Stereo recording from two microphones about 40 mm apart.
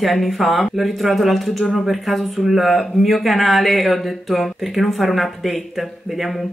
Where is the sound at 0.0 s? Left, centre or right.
Centre.